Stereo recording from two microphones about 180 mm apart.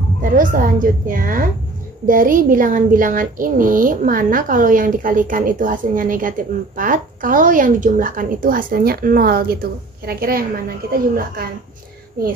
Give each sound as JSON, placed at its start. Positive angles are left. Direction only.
{"t": 0.2, "sound": "speech", "side_deg": -50}